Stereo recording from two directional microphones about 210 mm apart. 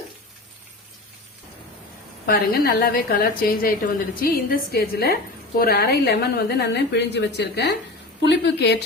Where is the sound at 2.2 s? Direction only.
45° left (ahead or behind).